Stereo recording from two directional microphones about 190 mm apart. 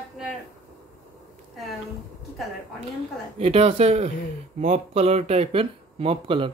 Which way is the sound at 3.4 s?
35° right (ahead or behind).